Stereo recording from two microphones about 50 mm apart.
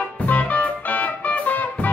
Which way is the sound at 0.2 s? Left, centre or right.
Left.